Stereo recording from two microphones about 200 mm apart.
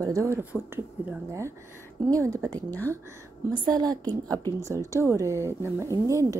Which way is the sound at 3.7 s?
20° right (ahead or behind).